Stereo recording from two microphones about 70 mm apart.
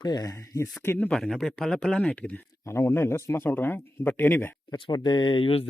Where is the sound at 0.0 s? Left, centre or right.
Left.